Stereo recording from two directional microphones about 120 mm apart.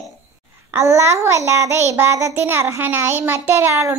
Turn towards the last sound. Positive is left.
turn(degrees=-25)  # may be behind; listen again after turning